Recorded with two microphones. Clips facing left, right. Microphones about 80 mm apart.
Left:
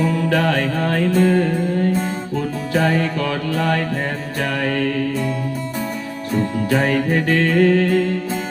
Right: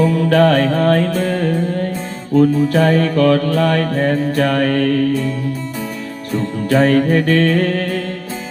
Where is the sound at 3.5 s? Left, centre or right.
Right.